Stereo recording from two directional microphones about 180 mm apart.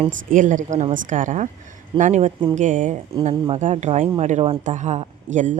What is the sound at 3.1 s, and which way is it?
Speech, 30° right (ahead or behind).